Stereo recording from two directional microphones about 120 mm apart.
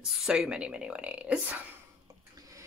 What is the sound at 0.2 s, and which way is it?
Speech, 5° right (ahead or behind).